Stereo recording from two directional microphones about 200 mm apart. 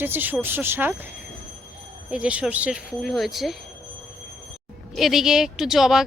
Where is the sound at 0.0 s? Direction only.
10° right (ahead or behind).